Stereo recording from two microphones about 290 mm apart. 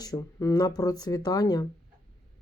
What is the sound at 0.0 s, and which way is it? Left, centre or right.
Speech, centre.